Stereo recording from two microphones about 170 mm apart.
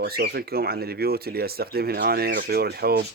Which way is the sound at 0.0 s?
65° right (ahead or behind).